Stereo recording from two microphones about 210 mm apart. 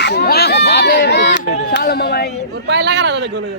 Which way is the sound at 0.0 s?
50° left (ahead or behind).